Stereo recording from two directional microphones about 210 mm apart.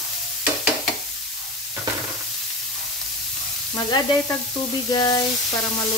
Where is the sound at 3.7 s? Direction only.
15° left (ahead or behind).